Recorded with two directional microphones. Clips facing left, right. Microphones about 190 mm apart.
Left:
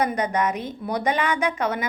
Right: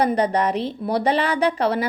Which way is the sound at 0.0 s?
35° right (ahead or behind).